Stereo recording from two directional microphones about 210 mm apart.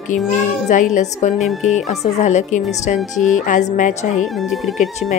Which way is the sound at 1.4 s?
Centre (ahead or behind).